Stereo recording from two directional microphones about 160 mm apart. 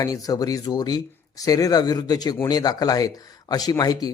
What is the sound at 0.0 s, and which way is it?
Speech, 20° left (ahead or behind).